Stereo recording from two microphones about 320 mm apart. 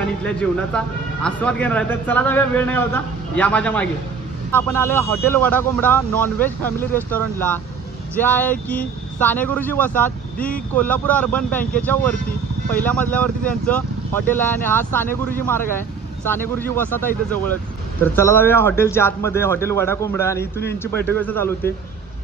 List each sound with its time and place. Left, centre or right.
0.2 s a man's voice: centre
16.3 s speech: centre